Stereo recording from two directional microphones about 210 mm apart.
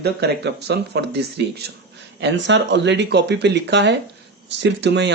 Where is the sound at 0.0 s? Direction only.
50° right (ahead or behind).